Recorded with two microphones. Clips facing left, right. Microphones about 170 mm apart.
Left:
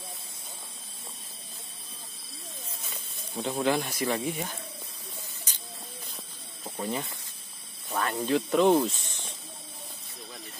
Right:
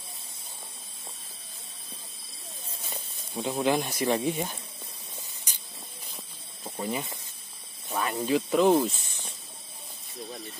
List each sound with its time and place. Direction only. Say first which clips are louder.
2.8 s snake: right 2 dB; 30° right (ahead or behind)
3.4 s speech: right 1 dB; 15° right (ahead or behind)
5.5 s a sound: even; 15° right (ahead or behind)
6.6 s snake: even; 5° right (ahead or behind)
7.9 s speech: even; 5° right (ahead or behind)